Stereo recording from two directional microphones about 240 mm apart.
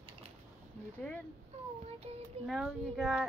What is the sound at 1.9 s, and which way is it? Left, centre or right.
Speech, right.